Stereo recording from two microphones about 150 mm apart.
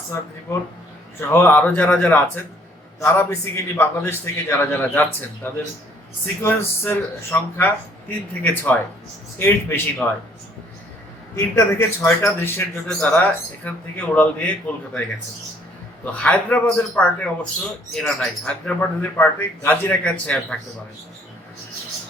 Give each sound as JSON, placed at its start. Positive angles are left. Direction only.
{"t": 1.3, "sound": "speech", "side_deg": 10}
{"t": 11.3, "sound": "speech", "side_deg": 15}
{"t": 16.1, "sound": "speech", "side_deg": 10}